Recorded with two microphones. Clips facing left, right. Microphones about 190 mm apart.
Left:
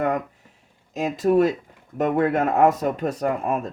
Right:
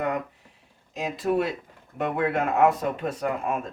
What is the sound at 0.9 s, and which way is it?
Speech, 45° left (ahead or behind).